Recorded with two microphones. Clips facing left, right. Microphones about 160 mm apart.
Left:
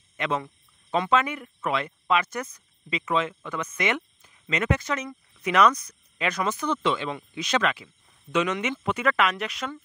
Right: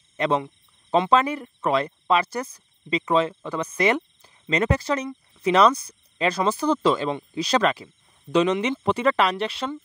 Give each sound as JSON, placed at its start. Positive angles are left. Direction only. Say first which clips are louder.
{"t": 0.2, "sound": "speech", "louder": "right 5 dB", "side_deg": -35}